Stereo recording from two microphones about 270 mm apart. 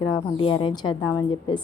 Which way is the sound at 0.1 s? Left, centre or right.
Centre.